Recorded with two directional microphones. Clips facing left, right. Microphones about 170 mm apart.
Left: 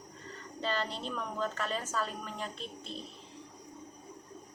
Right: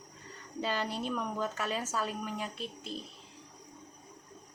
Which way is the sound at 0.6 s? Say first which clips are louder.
Right 1 dB; 10° right (ahead or behind).